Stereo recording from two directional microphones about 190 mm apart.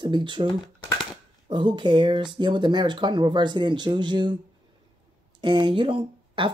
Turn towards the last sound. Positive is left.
turn(degrees=-25)  # may be behind; listen again after turning